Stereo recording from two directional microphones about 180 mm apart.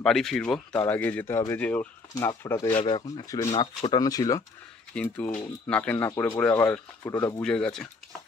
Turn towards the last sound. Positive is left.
turn(degrees=5)  # may be behind; listen again after turning